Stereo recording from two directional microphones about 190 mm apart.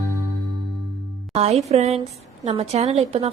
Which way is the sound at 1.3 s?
35° right (ahead or behind).